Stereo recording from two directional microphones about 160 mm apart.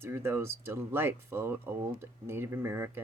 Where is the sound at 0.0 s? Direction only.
15° right (ahead or behind).